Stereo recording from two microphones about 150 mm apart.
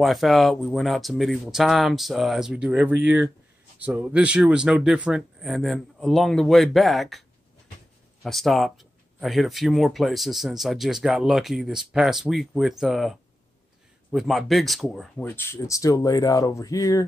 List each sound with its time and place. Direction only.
0.0 s speech: centre (ahead or behind)
15.2 s speech: 15° left (ahead or behind)